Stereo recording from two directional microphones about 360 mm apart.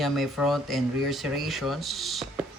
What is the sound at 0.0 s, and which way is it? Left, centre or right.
Speech, centre.